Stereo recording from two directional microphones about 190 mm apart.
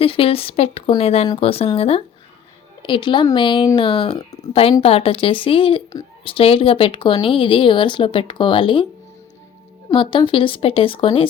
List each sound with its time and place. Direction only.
0.0 s speech: 30° left (ahead or behind)
9.9 s speech: 25° left (ahead or behind)